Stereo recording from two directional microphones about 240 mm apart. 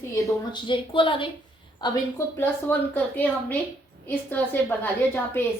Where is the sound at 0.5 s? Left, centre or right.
Left.